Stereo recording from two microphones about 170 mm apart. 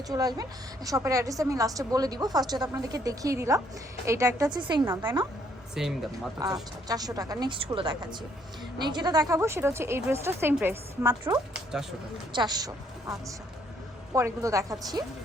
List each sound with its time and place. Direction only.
0.1 s a woman's voice: 20° right (ahead or behind)
5.8 s speech: 5° right (ahead or behind)
6.4 s a woman's voice: 20° right (ahead or behind)
12.3 s a woman's voice: 25° right (ahead or behind)